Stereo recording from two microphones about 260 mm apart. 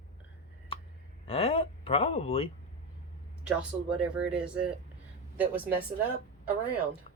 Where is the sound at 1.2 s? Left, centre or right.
Left.